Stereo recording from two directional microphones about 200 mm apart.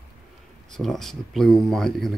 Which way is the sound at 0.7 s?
Centre (ahead or behind).